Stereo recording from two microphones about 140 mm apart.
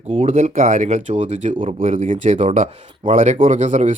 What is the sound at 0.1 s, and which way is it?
Speech, 45° right (ahead or behind).